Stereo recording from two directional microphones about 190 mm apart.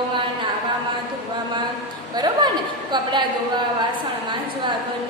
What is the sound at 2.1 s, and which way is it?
Speech, 20° right (ahead or behind).